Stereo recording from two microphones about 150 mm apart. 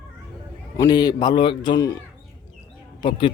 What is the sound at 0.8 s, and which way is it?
Speech, 25° left (ahead or behind).